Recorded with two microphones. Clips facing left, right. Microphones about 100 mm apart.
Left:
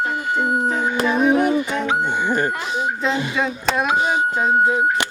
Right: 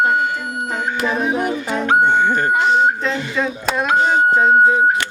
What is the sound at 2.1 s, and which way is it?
Music, 10° left (ahead or behind).